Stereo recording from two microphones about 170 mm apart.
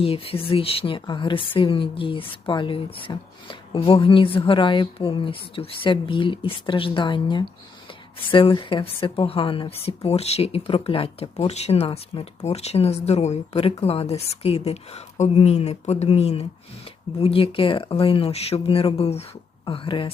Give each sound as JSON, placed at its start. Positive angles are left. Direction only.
{"t": 0.0, "sound": "speech", "side_deg": 35}